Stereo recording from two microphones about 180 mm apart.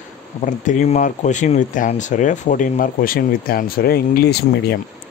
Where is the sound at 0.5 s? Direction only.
45° left (ahead or behind).